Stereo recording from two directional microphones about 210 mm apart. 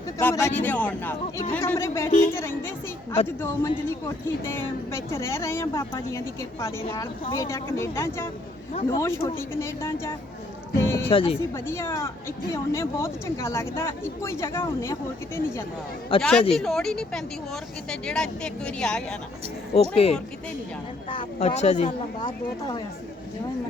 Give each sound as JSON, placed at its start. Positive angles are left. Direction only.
{"t": 0.2, "sound": "speech", "side_deg": 10}
{"t": 11.1, "sound": "speech", "side_deg": 25}
{"t": 11.5, "sound": "speech", "side_deg": 10}
{"t": 16.1, "sound": "speech", "side_deg": 25}
{"t": 16.5, "sound": "a woman's voice", "side_deg": 0}
{"t": 19.7, "sound": "speech", "side_deg": 30}
{"t": 22.2, "sound": "speech", "side_deg": 20}